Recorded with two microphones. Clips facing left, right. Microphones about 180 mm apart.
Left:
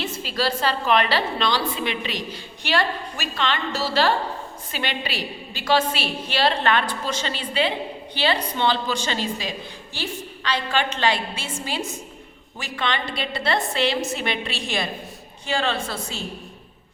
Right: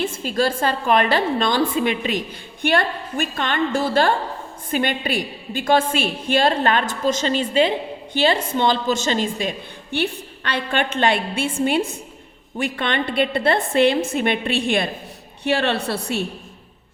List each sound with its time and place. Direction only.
0.0 s a woman's voice: 50° right (ahead or behind)